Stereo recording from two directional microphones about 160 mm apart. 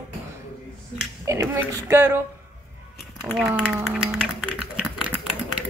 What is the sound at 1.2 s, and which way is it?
Speech, 20° right (ahead or behind).